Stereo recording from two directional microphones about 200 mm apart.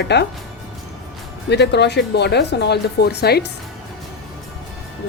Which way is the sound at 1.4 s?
60° left (ahead or behind).